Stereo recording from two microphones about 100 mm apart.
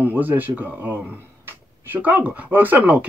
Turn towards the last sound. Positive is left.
turn(degrees=-15)  # may be behind; listen again after turning